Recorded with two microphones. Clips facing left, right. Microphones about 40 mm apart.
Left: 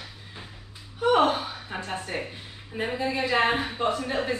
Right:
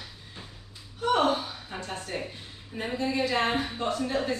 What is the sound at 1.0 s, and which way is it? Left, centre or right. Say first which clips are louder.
Gasp: left 3 dB; centre.